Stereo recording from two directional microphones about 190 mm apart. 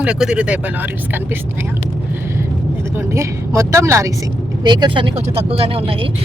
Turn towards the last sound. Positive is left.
turn(degrees=-30)  # may be behind; listen again after turning